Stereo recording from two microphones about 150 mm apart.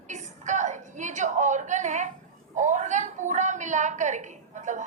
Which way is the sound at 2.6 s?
55° right (ahead or behind).